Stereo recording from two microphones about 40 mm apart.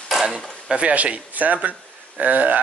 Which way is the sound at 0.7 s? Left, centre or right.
Right.